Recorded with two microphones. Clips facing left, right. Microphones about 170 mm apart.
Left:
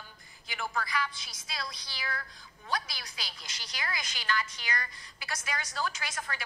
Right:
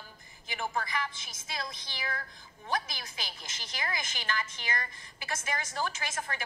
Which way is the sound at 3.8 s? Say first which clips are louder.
Right 2 dB; 25° right (ahead or behind).